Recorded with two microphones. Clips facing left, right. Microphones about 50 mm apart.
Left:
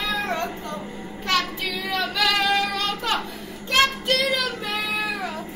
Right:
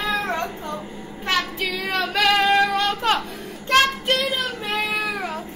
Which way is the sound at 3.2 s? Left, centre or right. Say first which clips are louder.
Right 3 dB; right.